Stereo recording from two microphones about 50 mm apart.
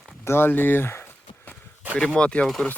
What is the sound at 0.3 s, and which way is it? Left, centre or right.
Speech, left.